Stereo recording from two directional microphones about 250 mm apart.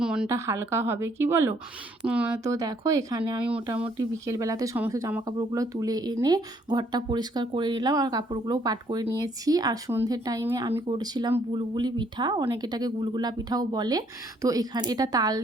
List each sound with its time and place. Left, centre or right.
0.0 s speech: centre
3.4 s speech: centre